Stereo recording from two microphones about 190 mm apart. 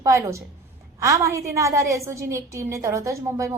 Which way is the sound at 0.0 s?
15° right (ahead or behind).